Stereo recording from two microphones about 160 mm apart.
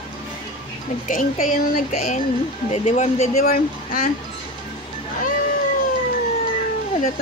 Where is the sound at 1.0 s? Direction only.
55° left (ahead or behind).